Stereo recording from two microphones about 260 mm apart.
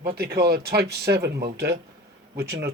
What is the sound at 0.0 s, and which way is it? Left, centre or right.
Speech, right.